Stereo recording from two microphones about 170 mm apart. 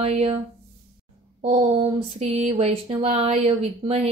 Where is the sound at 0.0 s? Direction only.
35° right (ahead or behind).